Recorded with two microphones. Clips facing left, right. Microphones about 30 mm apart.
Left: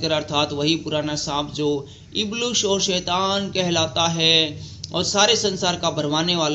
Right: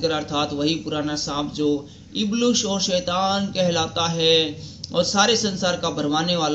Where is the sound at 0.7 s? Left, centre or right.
Left.